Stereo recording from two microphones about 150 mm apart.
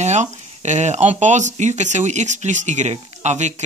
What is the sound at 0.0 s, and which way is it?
Speech, 50° right (ahead or behind).